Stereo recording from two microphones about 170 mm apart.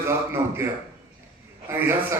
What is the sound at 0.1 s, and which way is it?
A man's voice, 15° right (ahead or behind).